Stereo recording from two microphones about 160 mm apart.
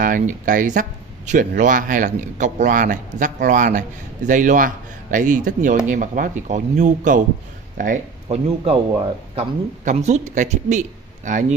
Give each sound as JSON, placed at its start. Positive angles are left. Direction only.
{"t": 0.0, "sound": "a man's voice", "side_deg": -55}
{"t": 8.3, "sound": "a man's voice", "side_deg": -40}